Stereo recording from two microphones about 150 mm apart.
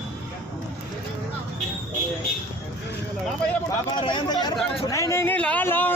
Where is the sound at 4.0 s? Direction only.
30° left (ahead or behind).